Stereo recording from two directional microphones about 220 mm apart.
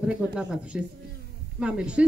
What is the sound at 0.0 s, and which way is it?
Speech, 5° right (ahead or behind).